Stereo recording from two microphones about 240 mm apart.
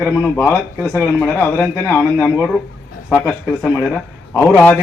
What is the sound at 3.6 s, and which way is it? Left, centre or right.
A man's voice, centre.